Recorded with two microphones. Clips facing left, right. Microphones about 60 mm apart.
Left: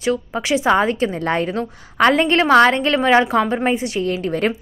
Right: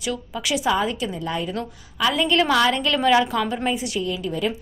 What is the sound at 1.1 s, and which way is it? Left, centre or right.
A woman's voice, left.